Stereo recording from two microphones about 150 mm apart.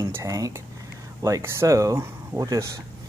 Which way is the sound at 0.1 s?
20° right (ahead or behind).